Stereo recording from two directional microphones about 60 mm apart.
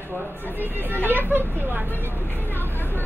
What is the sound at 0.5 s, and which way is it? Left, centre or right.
Speech, right.